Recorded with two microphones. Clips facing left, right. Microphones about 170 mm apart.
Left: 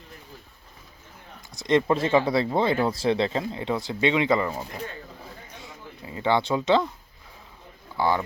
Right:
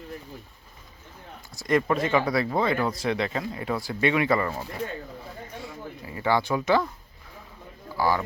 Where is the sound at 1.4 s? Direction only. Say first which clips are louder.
Left 2 dB; 15° left (ahead or behind).